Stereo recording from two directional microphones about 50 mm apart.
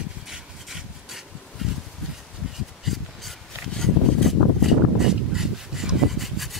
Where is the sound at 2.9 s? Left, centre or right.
Centre.